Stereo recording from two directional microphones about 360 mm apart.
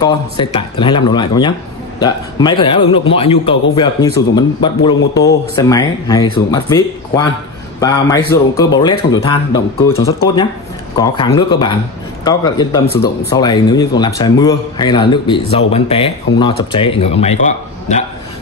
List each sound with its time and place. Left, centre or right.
0.0 s speech: centre
12.8 s speech: left
13.3 s speech: centre